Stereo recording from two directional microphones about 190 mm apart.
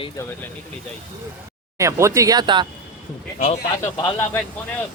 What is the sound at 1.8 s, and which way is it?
Speech, 15° right (ahead or behind).